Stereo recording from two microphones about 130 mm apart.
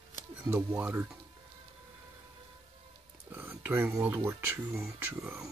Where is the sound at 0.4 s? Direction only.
15° right (ahead or behind).